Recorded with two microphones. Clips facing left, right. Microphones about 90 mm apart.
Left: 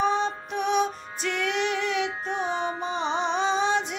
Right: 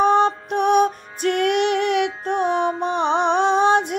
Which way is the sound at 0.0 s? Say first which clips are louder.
Right 8 dB; 60° right (ahead or behind).